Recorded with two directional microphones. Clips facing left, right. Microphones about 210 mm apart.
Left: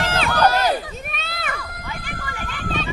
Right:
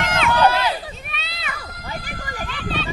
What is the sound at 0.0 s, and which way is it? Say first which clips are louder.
Run: right 1 dB; 35° left (ahead or behind).